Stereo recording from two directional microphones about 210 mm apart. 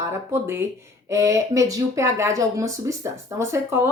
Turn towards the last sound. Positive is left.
turn(degrees=-15)  # may be behind; listen again after turning